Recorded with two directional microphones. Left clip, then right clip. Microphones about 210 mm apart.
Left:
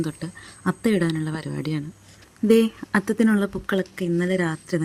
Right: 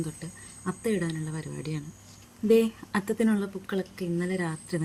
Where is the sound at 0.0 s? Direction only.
40° left (ahead or behind).